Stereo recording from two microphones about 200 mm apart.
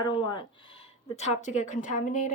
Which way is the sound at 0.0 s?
25° left (ahead or behind).